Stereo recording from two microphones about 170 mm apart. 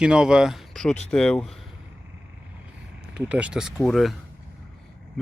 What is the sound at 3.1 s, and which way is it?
Speech, 5° right (ahead or behind).